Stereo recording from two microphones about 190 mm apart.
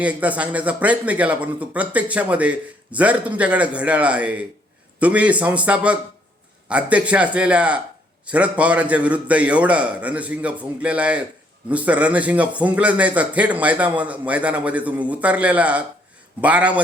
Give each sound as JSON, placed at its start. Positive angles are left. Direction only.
{"t": 0.0, "sound": "speech", "side_deg": -5}